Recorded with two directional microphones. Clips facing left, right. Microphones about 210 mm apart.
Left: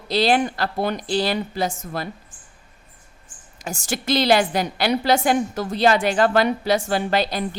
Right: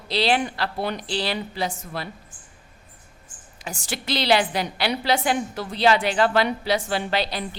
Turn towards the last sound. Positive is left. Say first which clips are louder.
# left 4 dB
turn(degrees=45)  # may be behind; listen again after turning